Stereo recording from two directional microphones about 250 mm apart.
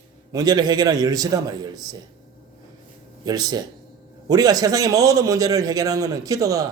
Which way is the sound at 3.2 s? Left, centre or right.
Centre.